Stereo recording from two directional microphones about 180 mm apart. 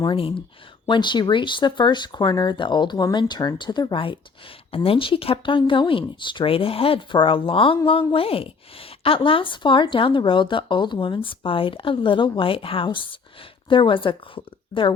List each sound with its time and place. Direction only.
0.0 s speech: 30° left (ahead or behind)